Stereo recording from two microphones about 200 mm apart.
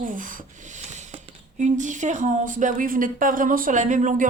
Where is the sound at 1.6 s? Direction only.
40° right (ahead or behind).